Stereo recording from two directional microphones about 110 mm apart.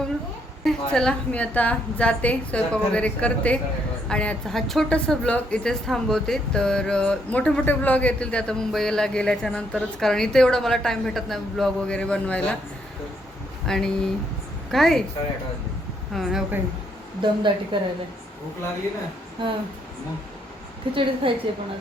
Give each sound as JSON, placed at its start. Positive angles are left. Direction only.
{"t": 0.6, "sound": "a woman's voice", "side_deg": 5}
{"t": 13.7, "sound": "speech", "side_deg": 5}
{"t": 16.1, "sound": "speech", "side_deg": 0}
{"t": 17.2, "sound": "a woman's voice", "side_deg": -45}
{"t": 20.9, "sound": "a woman's voice", "side_deg": -55}